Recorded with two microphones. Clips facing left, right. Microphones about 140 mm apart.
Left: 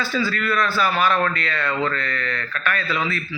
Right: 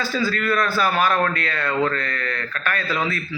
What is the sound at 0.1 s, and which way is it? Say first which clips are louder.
A man's voice: right 2 dB; 45° right (ahead or behind).